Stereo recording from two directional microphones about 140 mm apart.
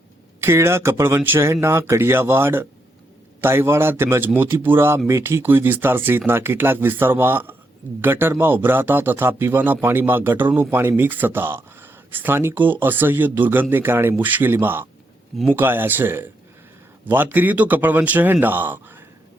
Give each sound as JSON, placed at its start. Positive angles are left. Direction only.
{"t": 0.3, "sound": "speech", "side_deg": -20}